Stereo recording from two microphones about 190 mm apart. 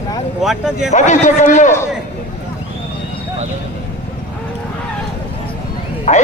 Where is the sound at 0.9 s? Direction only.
40° left (ahead or behind).